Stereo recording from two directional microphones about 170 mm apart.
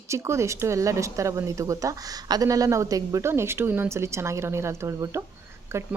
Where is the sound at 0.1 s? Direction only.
15° right (ahead or behind).